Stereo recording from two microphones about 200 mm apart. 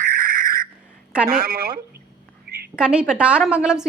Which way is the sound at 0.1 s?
45° right (ahead or behind).